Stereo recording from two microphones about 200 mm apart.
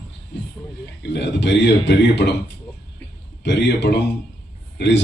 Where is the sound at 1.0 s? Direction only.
60° left (ahead or behind).